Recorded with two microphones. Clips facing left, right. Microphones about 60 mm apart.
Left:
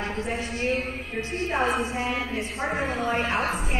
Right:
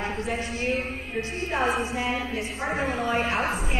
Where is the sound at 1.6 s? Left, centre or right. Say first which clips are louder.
Right 1 dB; left.